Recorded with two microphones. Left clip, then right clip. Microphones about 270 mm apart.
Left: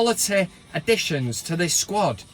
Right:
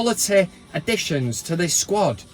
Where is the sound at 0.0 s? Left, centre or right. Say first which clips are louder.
Right 2 dB; centre.